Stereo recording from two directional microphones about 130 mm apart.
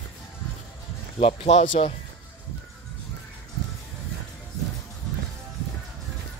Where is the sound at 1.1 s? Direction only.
55° left (ahead or behind); by 1.8 s 70° left (ahead or behind).